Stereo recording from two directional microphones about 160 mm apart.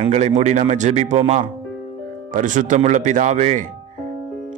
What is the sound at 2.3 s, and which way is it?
Speech, 55° right (ahead or behind).